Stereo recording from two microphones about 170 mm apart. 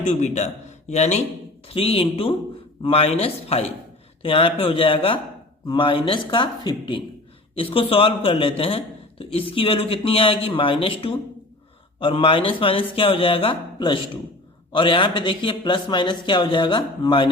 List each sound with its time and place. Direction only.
0.0 s a man's voice: 45° left (ahead or behind)